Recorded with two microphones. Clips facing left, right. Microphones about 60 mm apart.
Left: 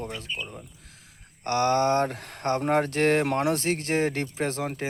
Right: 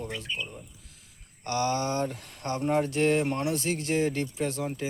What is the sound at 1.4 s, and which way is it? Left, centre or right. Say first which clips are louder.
Speech: left 6 dB; left.